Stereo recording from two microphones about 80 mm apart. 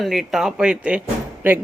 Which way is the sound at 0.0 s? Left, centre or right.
Centre.